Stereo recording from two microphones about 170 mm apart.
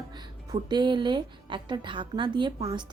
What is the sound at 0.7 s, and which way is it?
A woman's voice, 25° right (ahead or behind).